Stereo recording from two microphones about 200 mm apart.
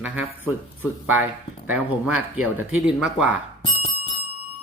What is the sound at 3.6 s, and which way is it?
Bicycle bell, 30° left (ahead or behind).